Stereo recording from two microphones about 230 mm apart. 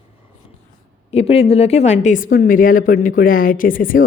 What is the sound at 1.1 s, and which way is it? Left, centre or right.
Speech, left.